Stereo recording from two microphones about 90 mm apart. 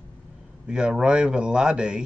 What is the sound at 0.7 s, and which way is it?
Speech, 10° right (ahead or behind).